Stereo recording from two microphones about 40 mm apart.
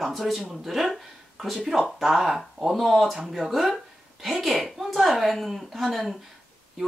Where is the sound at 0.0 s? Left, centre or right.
Centre.